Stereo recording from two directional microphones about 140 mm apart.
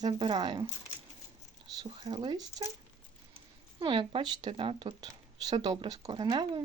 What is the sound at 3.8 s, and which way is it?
A woman's voice, 35° right (ahead or behind).